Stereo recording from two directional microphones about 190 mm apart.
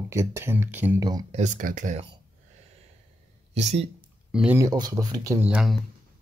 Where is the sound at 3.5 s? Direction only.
35° right (ahead or behind).